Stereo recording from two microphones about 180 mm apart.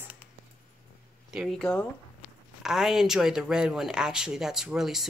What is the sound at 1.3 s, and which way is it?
Speech, centre (ahead or behind).